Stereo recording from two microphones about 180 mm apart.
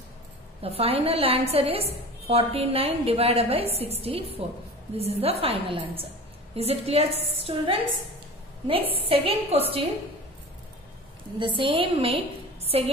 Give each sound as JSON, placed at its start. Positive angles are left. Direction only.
{"t": 0.6, "sound": "a woman's voice", "side_deg": -35}
{"t": 9.0, "sound": "a woman's voice", "side_deg": -30}
{"t": 11.3, "sound": "a woman's voice", "side_deg": -30}